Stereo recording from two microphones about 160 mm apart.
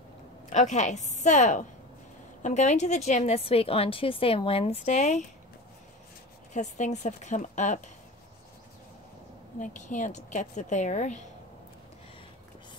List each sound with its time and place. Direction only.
0.5 s a woman's voice: 50° left (ahead or behind)
6.5 s a woman's voice: 50° left (ahead or behind)
9.6 s a woman's voice: 50° left (ahead or behind)